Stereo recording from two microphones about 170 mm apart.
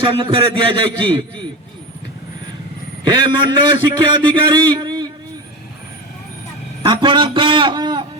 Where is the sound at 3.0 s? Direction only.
25° right (ahead or behind).